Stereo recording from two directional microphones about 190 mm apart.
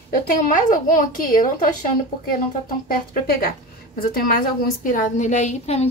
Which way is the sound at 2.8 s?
50° left (ahead or behind).